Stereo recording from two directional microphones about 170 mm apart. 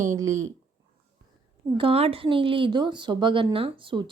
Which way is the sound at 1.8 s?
35° right (ahead or behind).